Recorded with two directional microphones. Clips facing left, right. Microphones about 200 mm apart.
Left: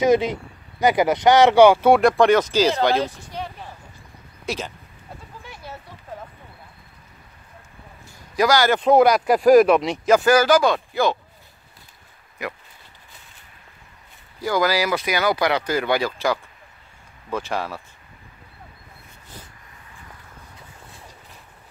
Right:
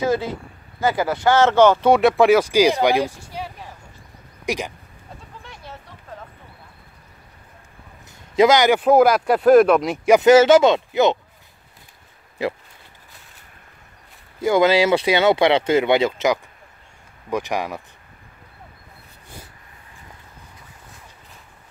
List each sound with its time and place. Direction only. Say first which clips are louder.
0.0 s speech: left 4 dB; 20° left (ahead or behind); by 4.7 s 15° right (ahead or behind)
5.4 s a sound: left 2 dB; 5° left (ahead or behind)
8.4 s speech: right 4 dB; 20° right (ahead or behind)
8.7 s speech: right 1 dB; 5° right (ahead or behind)
10.0 s speech: right 5 dB; 20° right (ahead or behind)
12.4 s speech: right 7 dB; 30° right (ahead or behind)
14.4 s speech: right 5 dB; 25° right (ahead or behind)